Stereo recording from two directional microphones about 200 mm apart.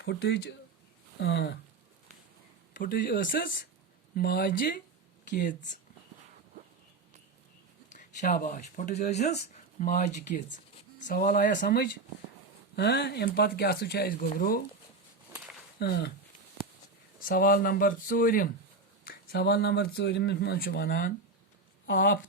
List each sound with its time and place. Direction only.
0.0 s speech: 60° left (ahead or behind)
2.7 s speech: 45° left (ahead or behind)
7.9 s speech: 40° left (ahead or behind)
15.8 s speech: 55° left (ahead or behind)
17.2 s speech: 45° left (ahead or behind)